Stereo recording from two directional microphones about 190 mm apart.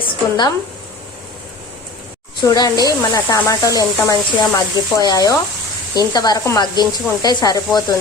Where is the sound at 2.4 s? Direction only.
20° left (ahead or behind).